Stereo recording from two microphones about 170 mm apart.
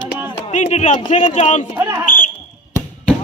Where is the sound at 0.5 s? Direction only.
45° left (ahead or behind).